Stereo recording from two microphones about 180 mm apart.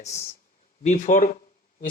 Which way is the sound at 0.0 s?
40° left (ahead or behind).